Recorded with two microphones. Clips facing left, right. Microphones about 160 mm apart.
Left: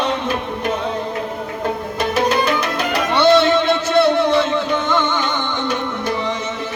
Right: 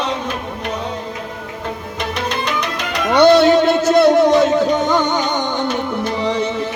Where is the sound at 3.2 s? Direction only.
40° right (ahead or behind).